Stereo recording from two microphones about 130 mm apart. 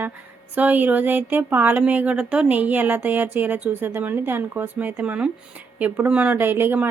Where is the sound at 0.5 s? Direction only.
15° right (ahead or behind).